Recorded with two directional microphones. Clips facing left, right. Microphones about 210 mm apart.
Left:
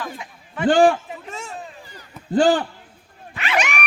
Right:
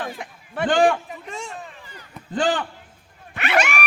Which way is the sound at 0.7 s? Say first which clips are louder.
Left 3 dB; 35° left (ahead or behind).